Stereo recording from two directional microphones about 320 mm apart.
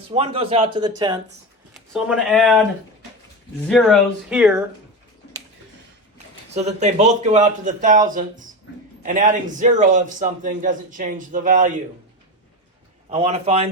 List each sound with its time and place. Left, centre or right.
0.1 s a man's voice: centre
1.7 s speech: centre
3.7 s speech: centre
6.5 s a man's voice: right
13.1 s a man's voice: centre